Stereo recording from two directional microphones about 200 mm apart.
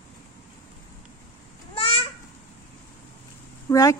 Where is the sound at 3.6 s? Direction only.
15° left (ahead or behind).